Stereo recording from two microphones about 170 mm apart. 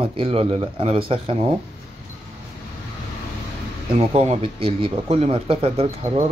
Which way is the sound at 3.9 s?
40° right (ahead or behind).